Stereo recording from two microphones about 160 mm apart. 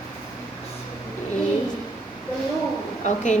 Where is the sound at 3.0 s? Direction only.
50° left (ahead or behind).